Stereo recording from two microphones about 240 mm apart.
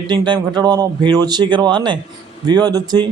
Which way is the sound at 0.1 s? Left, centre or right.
Centre.